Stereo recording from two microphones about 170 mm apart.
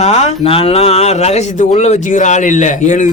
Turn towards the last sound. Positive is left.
turn(degrees=45)  # may be behind; listen again after turning